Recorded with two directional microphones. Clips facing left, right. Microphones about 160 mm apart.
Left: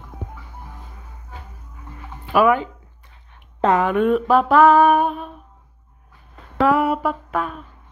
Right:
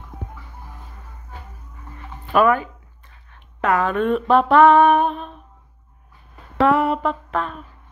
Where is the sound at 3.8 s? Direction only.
15° left (ahead or behind).